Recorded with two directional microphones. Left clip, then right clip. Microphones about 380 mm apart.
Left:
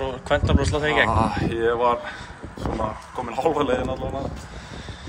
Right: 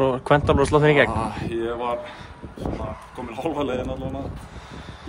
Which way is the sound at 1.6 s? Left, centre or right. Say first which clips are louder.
Left 8 dB; centre.